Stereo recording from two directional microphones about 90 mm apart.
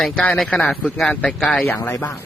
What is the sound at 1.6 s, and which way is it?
Speech, 25° left (ahead or behind).